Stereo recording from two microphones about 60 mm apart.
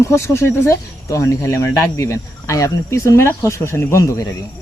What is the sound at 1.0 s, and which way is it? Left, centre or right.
Speech, left.